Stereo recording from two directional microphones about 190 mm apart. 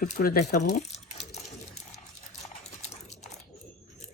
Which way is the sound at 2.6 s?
35° left (ahead or behind).